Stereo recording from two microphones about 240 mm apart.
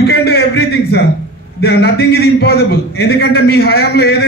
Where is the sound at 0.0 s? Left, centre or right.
Left.